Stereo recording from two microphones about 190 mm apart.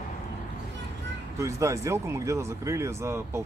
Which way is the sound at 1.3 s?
15° right (ahead or behind).